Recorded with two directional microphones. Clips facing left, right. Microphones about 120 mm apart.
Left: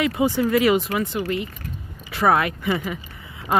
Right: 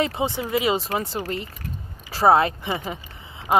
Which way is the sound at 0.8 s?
35° right (ahead or behind).